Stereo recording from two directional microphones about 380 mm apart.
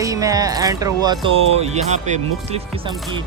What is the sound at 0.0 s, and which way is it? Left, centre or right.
Speech, centre.